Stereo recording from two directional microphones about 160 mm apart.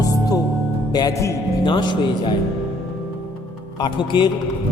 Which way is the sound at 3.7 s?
30° left (ahead or behind).